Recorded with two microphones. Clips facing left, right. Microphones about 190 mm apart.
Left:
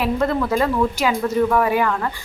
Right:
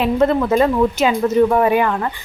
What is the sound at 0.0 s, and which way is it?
Speech, 20° right (ahead or behind).